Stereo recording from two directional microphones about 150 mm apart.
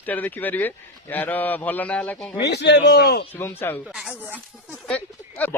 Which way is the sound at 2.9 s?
90° left.